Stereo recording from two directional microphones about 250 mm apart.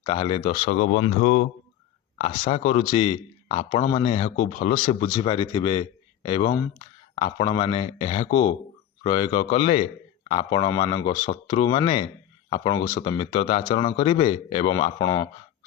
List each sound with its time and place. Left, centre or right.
0.0 s speech: left